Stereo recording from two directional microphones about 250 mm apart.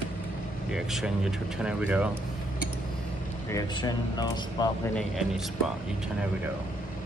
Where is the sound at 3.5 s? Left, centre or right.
Centre.